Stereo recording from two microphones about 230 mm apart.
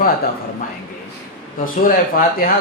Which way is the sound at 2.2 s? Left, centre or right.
Left.